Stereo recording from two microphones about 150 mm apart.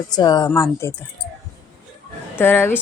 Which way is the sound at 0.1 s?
25° left (ahead or behind).